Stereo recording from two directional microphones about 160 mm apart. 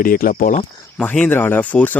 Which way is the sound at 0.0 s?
60° left (ahead or behind).